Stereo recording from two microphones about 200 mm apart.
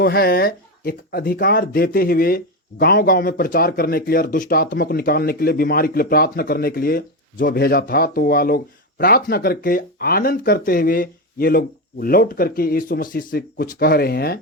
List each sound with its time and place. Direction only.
0.0 s speech: 50° left (ahead or behind)